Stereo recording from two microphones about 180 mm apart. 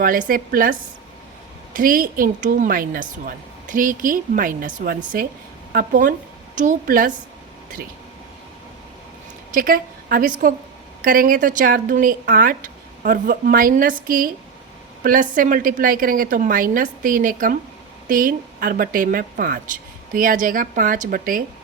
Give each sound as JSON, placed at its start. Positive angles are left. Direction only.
{"t": 0.0, "sound": "a woman's voice", "side_deg": -50}
{"t": 9.5, "sound": "a woman's voice", "side_deg": -50}